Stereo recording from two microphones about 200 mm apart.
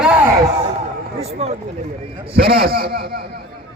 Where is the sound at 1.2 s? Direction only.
30° right (ahead or behind).